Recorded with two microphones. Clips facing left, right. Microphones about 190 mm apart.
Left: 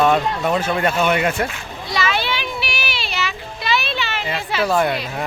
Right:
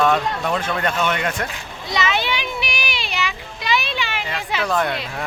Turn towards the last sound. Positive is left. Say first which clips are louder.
# left 3 dB
turn(degrees=5)  # may be behind; listen again after turning